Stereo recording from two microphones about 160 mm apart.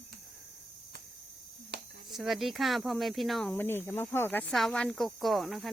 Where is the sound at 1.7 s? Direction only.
90° right.